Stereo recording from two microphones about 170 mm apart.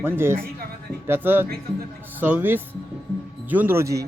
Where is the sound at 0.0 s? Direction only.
15° right (ahead or behind).